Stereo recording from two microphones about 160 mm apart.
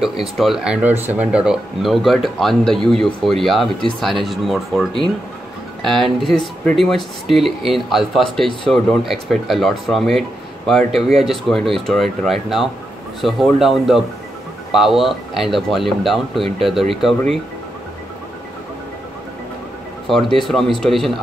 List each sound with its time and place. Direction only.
0.4 s speech: 5° right (ahead or behind)
16.3 s speech: 35° right (ahead or behind)
16.6 s speech: centre (ahead or behind)
20.1 s speech: centre (ahead or behind)